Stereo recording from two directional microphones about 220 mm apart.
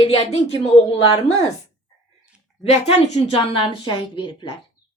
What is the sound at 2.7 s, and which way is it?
Speech, 30° left (ahead or behind).